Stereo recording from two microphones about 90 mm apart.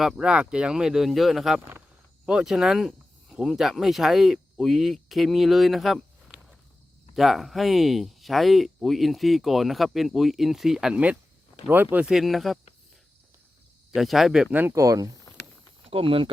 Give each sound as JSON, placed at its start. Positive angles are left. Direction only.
{"t": 0.0, "sound": "speech", "side_deg": -5}
{"t": 11.7, "sound": "speech", "side_deg": -20}
{"t": 12.0, "sound": "speech", "side_deg": 0}
{"t": 13.9, "sound": "speech", "side_deg": 0}
{"t": 14.7, "sound": "speech", "side_deg": -35}
{"t": 15.8, "sound": "speech", "side_deg": -90}